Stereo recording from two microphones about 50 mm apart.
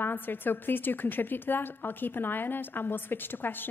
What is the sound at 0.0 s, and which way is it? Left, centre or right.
A woman's voice, left.